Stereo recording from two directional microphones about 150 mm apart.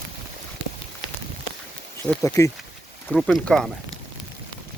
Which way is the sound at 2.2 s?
20° left (ahead or behind).